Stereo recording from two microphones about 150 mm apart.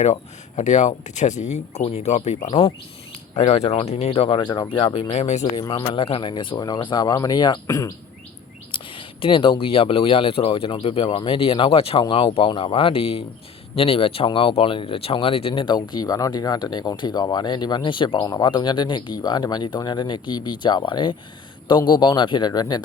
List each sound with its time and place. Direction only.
0.0 s speech: 50° left (ahead or behind); by 5.1 s 35° left (ahead or behind)
5.1 s speech: 50° left (ahead or behind)
5.5 s speech: 25° left (ahead or behind)
8.7 s speech: 35° left (ahead or behind)